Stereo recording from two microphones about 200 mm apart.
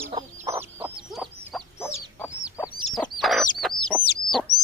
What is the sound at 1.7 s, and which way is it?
Chicken, 15° left (ahead or behind).